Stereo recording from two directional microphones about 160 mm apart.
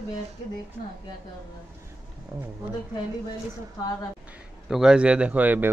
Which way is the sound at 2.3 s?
15° right (ahead or behind).